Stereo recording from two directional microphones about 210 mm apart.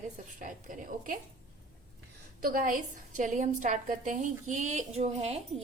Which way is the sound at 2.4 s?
40° right (ahead or behind).